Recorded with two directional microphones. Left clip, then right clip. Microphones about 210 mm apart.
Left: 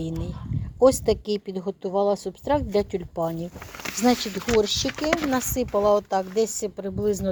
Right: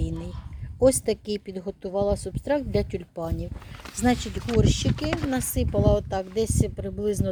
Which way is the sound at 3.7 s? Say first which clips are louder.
Left 7 dB; 55° left (ahead or behind).